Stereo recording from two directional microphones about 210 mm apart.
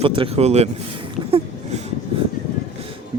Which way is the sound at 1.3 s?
25° right (ahead or behind).